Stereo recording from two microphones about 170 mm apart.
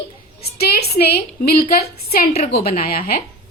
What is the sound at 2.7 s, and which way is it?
Speech, 60° left (ahead or behind).